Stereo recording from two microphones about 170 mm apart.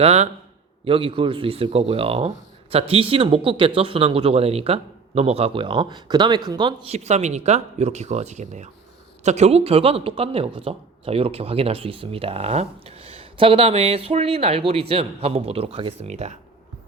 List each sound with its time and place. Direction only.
0.0 s speech: 40° right (ahead or behind)
6.8 s speech: 40° right (ahead or behind)